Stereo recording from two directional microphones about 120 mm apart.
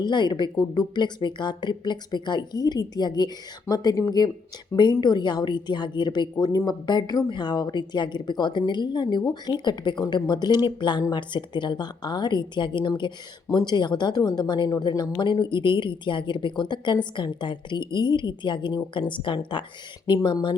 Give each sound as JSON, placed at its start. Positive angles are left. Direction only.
{"t": 0.0, "sound": "a woman's voice", "side_deg": 40}
{"t": 6.3, "sound": "a woman's voice", "side_deg": 30}